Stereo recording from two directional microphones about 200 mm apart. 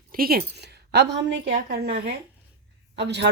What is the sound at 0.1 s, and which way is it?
A woman's voice, 50° right (ahead or behind).